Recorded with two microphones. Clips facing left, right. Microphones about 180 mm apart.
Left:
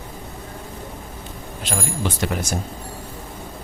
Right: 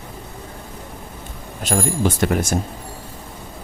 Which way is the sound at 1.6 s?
45° right (ahead or behind).